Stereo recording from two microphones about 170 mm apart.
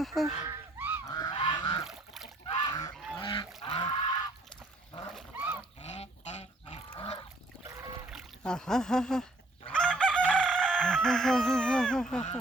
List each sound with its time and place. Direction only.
0.0 s speech: centre (ahead or behind)
0.4 s goose: 10° right (ahead or behind)
1.0 s goose: 20° left (ahead or behind)
1.8 s a sound: centre (ahead or behind)
2.6 s goose: 25° left (ahead or behind)
5.8 s goose: 40° left (ahead or behind)
8.1 s speech: 5° left (ahead or behind)
9.6 s chicken: 5° left (ahead or behind)